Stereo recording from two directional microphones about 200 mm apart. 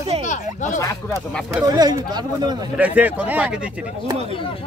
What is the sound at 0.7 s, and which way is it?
Speech, 15° left (ahead or behind).